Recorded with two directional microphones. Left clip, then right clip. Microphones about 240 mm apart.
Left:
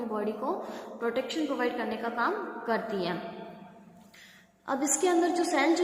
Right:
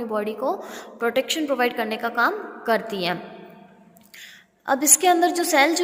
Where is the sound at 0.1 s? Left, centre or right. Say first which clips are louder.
Right 8 dB; right.